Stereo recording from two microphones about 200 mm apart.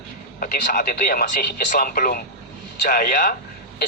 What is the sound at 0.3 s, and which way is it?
Speech, 45° left (ahead or behind).